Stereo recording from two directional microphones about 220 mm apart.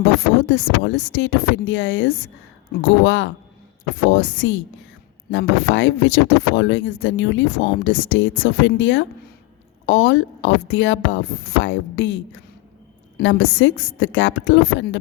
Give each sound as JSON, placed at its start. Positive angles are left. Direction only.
{"t": 0.0, "sound": "speech", "side_deg": 55}